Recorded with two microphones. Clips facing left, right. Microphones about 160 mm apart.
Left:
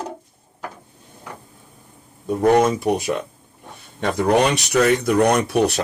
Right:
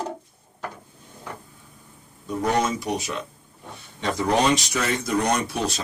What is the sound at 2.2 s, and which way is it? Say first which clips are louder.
Speech: left 8 dB; 55° left (ahead or behind).